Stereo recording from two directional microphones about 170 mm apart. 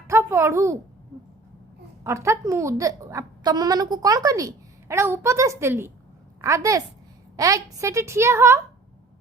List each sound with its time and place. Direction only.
0.1 s speech: 15° right (ahead or behind)
2.0 s a woman's voice: 15° right (ahead or behind)